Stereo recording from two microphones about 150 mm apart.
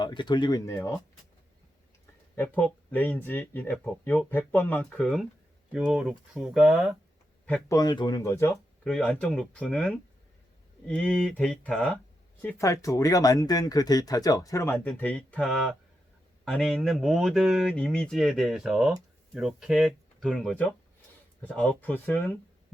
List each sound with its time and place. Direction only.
0.0 s speech: 30° left (ahead or behind)
2.3 s speech: 10° left (ahead or behind)
7.7 s speech: 25° left (ahead or behind)
8.8 s speech: 5° left (ahead or behind)
12.5 s speech: 20° left (ahead or behind)